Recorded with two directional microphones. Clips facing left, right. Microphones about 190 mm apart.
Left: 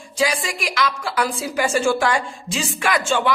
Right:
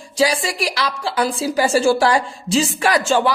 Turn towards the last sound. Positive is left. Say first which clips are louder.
# right 4 dB
turn(degrees=-35)  # may be behind; listen again after turning